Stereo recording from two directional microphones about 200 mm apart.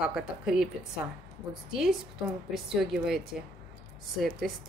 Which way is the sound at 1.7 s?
Centre (ahead or behind).